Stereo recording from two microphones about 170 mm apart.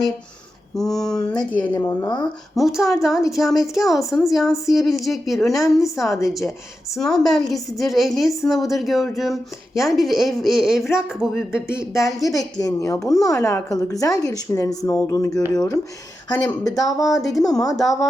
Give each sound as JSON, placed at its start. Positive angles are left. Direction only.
{"t": 0.8, "sound": "a woman's voice", "side_deg": 5}
{"t": 2.6, "sound": "a woman's voice", "side_deg": 0}
{"t": 12.0, "sound": "a woman's voice", "side_deg": 20}
{"t": 17.0, "sound": "a woman's voice", "side_deg": 0}